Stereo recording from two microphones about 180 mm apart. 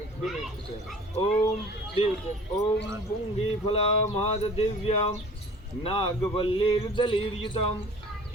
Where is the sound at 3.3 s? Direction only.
35° left (ahead or behind).